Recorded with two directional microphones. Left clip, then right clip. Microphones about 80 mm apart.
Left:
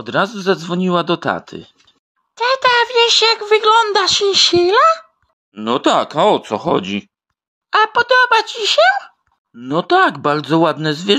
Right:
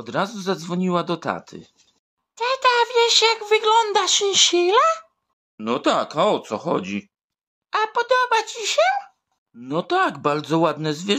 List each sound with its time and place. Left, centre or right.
0.0 s a man's voice: left
2.3 s a sound: left
3.9 s speech: left
5.6 s speech: left
9.8 s a man's voice: left